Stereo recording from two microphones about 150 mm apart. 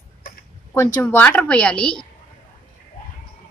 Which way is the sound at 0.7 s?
15° left (ahead or behind).